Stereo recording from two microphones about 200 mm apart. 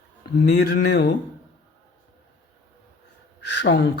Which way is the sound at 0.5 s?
50° left (ahead or behind).